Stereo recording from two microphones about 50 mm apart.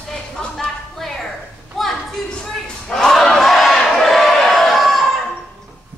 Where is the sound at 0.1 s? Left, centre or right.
Centre.